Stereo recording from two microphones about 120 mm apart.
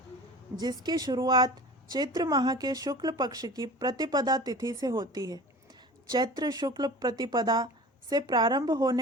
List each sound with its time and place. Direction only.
0.5 s speech: 35° right (ahead or behind)